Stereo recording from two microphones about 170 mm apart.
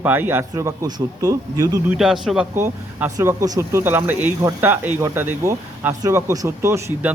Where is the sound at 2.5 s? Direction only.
15° right (ahead or behind).